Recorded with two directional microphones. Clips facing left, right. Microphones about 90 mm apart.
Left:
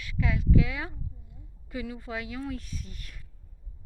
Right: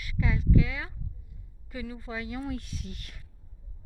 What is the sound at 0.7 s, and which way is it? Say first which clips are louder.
Speech: left 2 dB; 20° left (ahead or behind).